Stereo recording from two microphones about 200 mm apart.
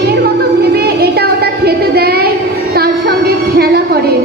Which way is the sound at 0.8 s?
50° right (ahead or behind).